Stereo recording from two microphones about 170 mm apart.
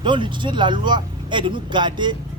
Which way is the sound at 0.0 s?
30° right (ahead or behind).